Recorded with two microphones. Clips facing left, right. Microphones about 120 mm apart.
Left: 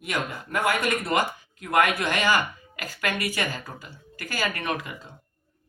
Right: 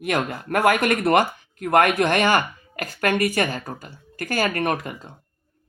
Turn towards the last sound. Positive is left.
turn(degrees=-50)  # may be behind; listen again after turning